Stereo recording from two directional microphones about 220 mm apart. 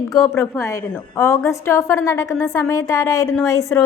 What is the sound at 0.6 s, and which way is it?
A woman's voice, 15° left (ahead or behind).